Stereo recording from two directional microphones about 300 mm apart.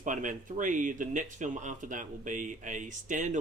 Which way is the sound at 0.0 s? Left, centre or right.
Right.